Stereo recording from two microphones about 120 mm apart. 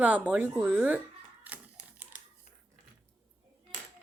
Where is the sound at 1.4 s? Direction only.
10° right (ahead or behind).